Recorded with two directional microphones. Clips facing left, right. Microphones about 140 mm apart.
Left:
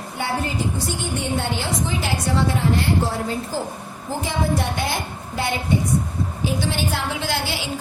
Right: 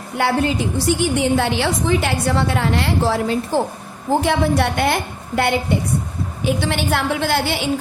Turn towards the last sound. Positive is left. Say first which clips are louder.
# right 6 dB
turn(degrees=-55)  # may be behind; listen again after turning